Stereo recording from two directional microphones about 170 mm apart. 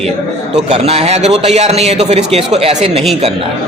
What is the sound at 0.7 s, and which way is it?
A man's voice, 40° right (ahead or behind).